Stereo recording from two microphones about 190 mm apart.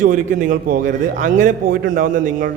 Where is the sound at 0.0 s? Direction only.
45° right (ahead or behind).